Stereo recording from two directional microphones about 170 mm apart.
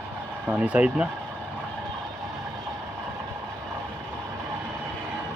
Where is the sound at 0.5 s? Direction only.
10° right (ahead or behind).